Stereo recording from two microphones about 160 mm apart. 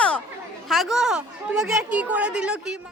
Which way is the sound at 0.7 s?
Centre (ahead or behind).